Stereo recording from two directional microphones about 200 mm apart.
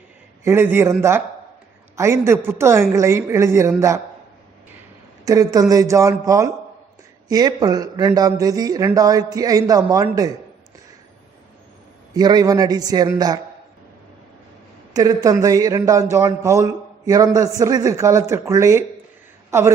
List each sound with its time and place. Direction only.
0.4 s a man's voice: 10° right (ahead or behind)
5.2 s a man's voice: 15° right (ahead or behind)
12.1 s a man's voice: 20° right (ahead or behind)
14.9 s a man's voice: 20° right (ahead or behind)